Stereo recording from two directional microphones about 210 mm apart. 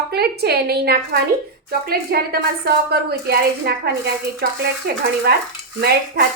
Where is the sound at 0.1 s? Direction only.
50° right (ahead or behind).